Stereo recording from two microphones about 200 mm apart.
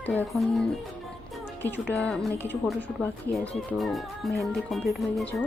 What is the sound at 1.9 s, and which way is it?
Speech, 5° left (ahead or behind).